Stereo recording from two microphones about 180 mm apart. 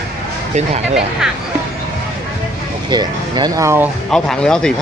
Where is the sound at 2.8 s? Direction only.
25° right (ahead or behind).